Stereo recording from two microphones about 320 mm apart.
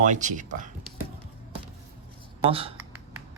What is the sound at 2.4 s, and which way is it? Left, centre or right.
Speech, centre.